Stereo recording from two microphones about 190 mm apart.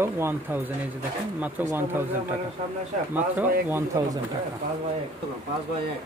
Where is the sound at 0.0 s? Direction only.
10° right (ahead or behind).